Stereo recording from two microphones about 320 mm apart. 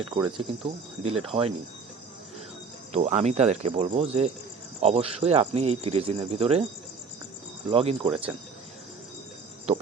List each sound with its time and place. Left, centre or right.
0.0 s speech: centre
2.9 s speech: right
7.7 s speech: centre